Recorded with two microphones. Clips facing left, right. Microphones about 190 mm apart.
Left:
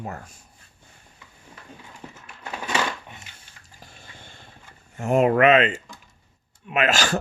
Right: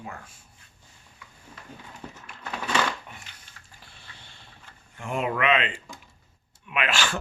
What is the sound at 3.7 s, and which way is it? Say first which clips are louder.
Water: left 6 dB; 45° left (ahead or behind).